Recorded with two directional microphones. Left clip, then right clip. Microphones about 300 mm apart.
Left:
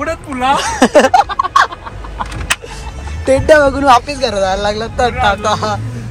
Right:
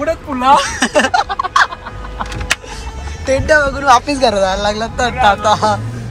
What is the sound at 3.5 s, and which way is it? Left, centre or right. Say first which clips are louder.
Speech: even; centre.